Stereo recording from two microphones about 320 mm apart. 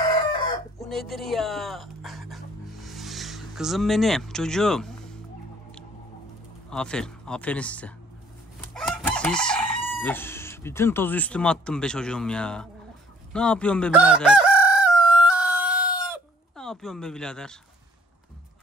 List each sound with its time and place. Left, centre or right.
0.7 s a sound: centre
6.7 s speech: centre
8.7 s chicken: centre
13.3 s crowing: centre
16.0 s chicken: centre